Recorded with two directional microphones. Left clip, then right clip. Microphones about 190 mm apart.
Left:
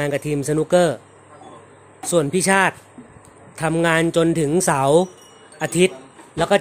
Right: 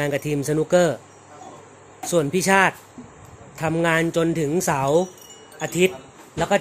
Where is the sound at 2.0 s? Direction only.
15° left (ahead or behind).